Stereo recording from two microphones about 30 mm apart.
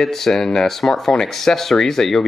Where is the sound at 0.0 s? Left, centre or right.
Centre.